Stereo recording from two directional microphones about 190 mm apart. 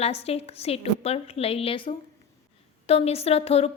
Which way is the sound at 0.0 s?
30° left (ahead or behind).